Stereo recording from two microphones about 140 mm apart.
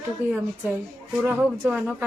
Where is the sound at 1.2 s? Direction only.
15° right (ahead or behind).